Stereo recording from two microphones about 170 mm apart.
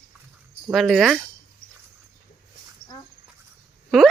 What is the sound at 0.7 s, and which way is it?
Speech, centre (ahead or behind).